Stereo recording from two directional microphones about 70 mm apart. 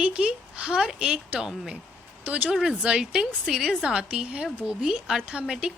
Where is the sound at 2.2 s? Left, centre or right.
Right.